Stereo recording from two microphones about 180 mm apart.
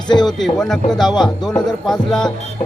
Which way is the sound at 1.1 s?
25° left (ahead or behind).